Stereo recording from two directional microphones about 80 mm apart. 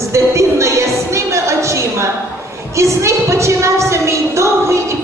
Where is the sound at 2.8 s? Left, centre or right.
Right.